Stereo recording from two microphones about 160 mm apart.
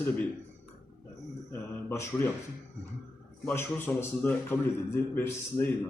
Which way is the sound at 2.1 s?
15° left (ahead or behind).